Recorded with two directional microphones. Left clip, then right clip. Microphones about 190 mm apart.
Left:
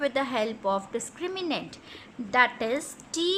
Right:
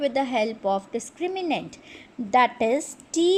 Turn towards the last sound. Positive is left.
turn(degrees=-10)  # may be behind; listen again after turning